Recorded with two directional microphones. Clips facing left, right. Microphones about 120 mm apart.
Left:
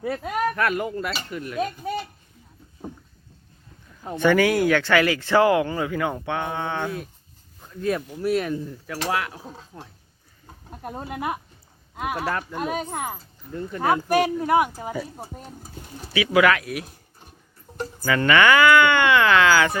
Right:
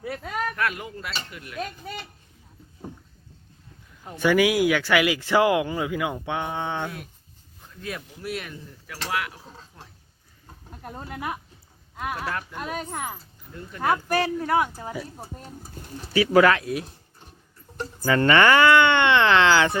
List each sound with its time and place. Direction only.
0.2 s a sound: 10° left (ahead or behind)
0.5 s speech: 45° left (ahead or behind)
1.5 s speech: 15° left (ahead or behind)
4.2 s speech: 10° right (ahead or behind)
7.8 s speech: 40° left (ahead or behind)
10.8 s speech: 15° left (ahead or behind)
12.1 s speech: 40° left (ahead or behind)
12.5 s speech: 25° left (ahead or behind)
14.9 s speech: 5° left (ahead or behind)
16.1 s speech: 35° right (ahead or behind)
18.0 s speech: 30° right (ahead or behind)